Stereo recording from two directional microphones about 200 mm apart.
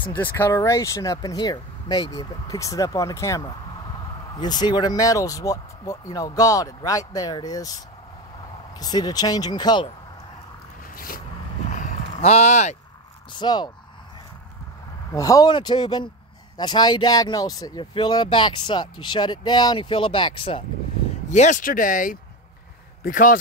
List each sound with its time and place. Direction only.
0.0 s speech: 10° left (ahead or behind)
11.7 s a sound: 35° left (ahead or behind)
13.3 s speech: 20° left (ahead or behind)
15.1 s speech: 15° left (ahead or behind)
21.3 s speech: 40° left (ahead or behind)